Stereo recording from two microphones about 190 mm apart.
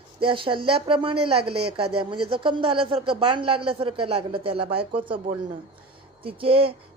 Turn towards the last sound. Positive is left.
turn(degrees=-30)  # may be behind; listen again after turning